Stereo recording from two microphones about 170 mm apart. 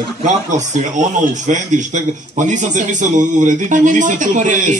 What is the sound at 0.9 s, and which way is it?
Speech, 45° right (ahead or behind).